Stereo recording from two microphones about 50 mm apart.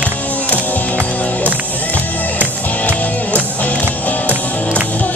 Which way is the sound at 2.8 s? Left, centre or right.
Left.